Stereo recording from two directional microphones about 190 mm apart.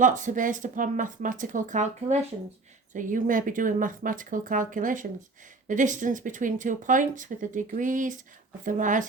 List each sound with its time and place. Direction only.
0.0 s speech: 40° right (ahead or behind)